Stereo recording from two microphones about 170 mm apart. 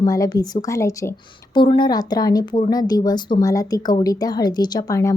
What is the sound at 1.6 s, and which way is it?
Speech, 30° left (ahead or behind).